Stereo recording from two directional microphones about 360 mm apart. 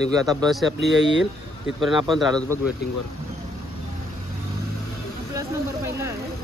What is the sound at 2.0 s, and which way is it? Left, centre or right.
Speech, centre.